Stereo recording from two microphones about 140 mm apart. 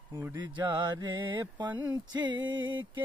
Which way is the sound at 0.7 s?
30° right (ahead or behind).